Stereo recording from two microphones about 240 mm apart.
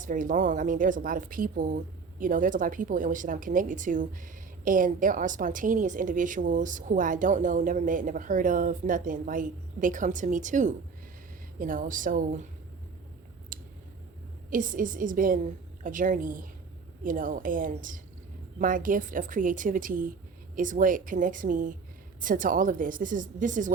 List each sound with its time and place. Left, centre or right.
0.0 s speech: right
13.5 s a sound: right
14.5 s speech: right